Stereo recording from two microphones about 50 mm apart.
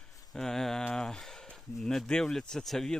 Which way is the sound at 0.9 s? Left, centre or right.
Centre.